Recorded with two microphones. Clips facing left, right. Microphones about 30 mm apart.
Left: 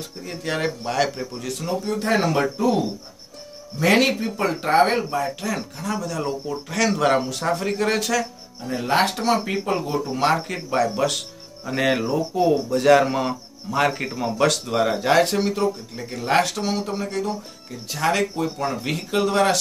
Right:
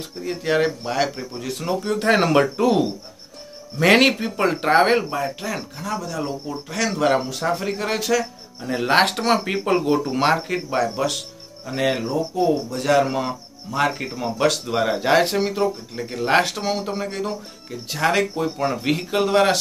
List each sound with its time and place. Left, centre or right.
0.2 s speech: centre
1.9 s speech: right
3.8 s speech: right
5.1 s speech: centre
8.2 s speech: right
8.8 s speech: right
9.4 s speech: right
10.2 s speech: centre
11.6 s speech: centre